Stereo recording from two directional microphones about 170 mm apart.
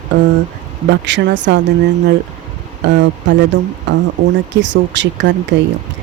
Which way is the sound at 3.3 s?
90° right.